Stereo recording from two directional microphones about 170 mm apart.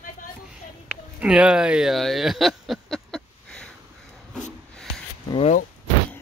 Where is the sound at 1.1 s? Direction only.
5° right (ahead or behind).